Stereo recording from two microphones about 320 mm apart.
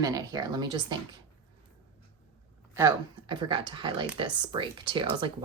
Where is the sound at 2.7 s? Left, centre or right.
Centre.